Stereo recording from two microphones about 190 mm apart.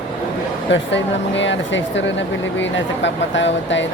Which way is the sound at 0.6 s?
70° left (ahead or behind).